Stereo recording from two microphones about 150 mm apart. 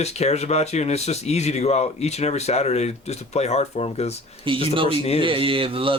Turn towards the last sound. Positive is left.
turn(degrees=-35)  # may be behind; listen again after turning